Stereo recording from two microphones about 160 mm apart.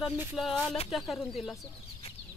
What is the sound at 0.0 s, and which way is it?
Speech, 15° right (ahead or behind).